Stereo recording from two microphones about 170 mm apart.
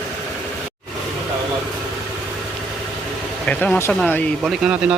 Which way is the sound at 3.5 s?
10° left (ahead or behind).